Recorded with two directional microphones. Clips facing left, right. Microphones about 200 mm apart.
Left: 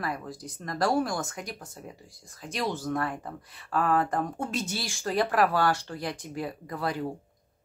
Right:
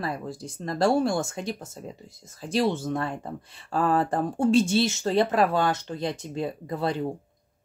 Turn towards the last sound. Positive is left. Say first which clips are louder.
# right 4 dB
turn(degrees=-25)  # may be behind; listen again after turning